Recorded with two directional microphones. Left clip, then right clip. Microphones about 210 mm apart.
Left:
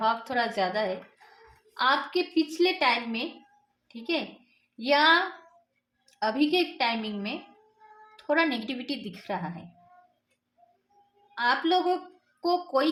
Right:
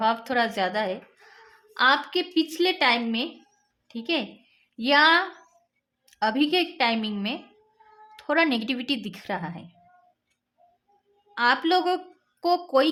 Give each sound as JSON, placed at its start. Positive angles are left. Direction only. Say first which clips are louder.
{"t": 0.0, "sound": "a woman's voice", "louder": "right 3 dB", "side_deg": -40}
{"t": 11.3, "sound": "speech", "louder": "right 3 dB", "side_deg": -40}